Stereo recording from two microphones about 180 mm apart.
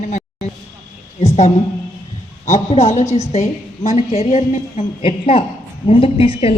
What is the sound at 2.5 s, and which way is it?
Speech, 35° left (ahead or behind).